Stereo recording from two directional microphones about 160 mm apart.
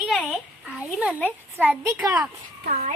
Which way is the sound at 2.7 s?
50° right (ahead or behind).